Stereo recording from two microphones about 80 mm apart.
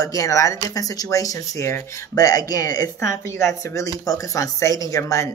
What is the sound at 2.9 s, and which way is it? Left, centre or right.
Speech, left.